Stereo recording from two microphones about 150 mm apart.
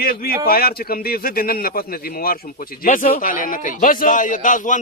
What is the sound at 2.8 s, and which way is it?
Speech, 60° left (ahead or behind).